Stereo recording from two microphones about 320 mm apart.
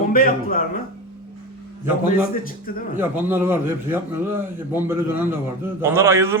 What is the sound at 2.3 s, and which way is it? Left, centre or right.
Speech, left.